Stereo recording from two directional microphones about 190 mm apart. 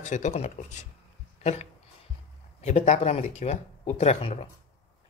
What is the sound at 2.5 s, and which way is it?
Speech, 35° left (ahead or behind).